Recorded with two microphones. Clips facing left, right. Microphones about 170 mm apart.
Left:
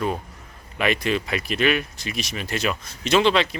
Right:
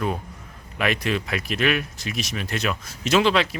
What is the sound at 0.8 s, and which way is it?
Speech, centre (ahead or behind).